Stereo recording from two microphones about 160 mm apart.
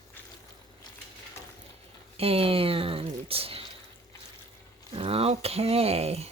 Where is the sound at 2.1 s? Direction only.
35° right (ahead or behind).